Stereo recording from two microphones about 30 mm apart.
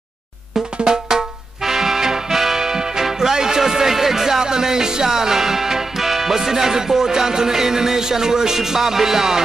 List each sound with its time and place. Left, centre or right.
0.8 s drum: right
1.6 s music: centre
2.6 s speech: centre